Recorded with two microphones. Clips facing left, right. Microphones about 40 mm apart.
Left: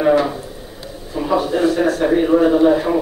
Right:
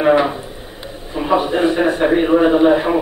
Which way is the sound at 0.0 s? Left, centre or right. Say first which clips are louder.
Right 1 dB; right.